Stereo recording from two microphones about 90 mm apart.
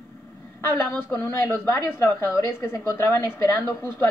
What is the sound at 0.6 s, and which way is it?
A woman's voice, 25° left (ahead or behind).